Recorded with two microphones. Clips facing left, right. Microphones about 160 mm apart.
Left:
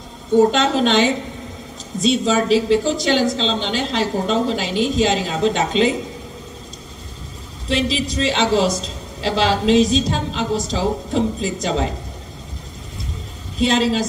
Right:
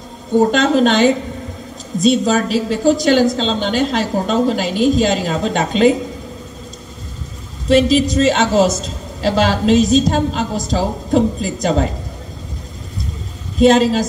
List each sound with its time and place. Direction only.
0.5 s a man's voice: 45° right (ahead or behind)
7.6 s a man's voice: 45° right (ahead or behind)
13.6 s a man's voice: 45° right (ahead or behind)